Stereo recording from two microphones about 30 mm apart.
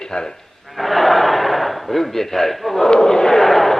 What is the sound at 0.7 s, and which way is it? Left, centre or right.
A man's voice, centre.